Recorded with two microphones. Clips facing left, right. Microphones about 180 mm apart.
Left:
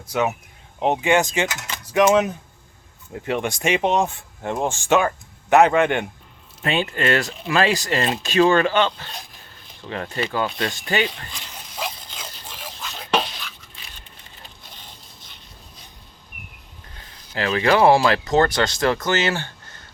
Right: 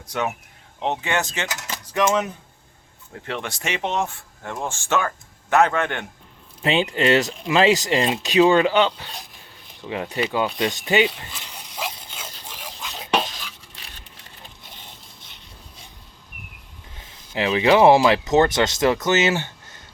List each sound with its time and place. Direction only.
0.8 s speech: 15° left (ahead or behind)
1.5 s speech: 40° right (ahead or behind)
1.9 s speech: 10° left (ahead or behind)
6.6 s speech: 15° right (ahead or behind)
9.8 s a sound: 15° right (ahead or behind)
17.0 s speech: 15° right (ahead or behind)